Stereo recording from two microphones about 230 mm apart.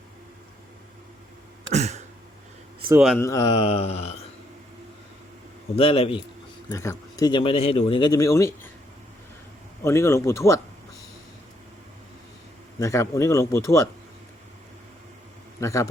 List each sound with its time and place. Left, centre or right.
1.7 s a sound: right
3.2 s speech: centre
5.7 s speech: left
9.8 s speech: centre
12.8 s speech: centre
15.6 s speech: centre